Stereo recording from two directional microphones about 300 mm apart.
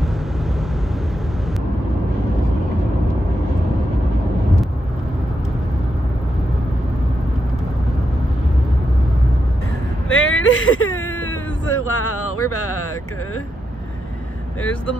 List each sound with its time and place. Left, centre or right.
10.0 s whimper: left
11.2 s a sound: left
14.6 s speech: centre